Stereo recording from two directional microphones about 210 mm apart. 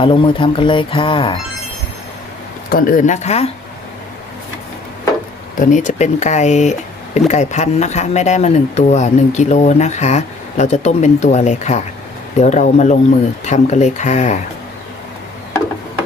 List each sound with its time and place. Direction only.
0.0 s speech: 25° left (ahead or behind)
2.6 s speech: 40° left (ahead or behind)
5.5 s speech: 35° left (ahead or behind)